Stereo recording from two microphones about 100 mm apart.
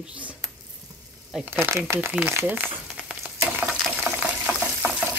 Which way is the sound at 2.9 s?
10° right (ahead or behind).